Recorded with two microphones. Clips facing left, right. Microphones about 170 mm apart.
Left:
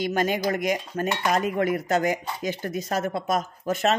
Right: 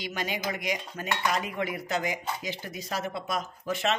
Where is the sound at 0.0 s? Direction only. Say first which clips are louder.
Left 9 dB; 50° left (ahead or behind).